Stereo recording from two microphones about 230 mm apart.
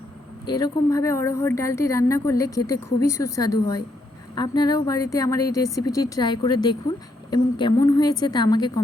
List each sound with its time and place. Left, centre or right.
0.4 s a woman's voice: centre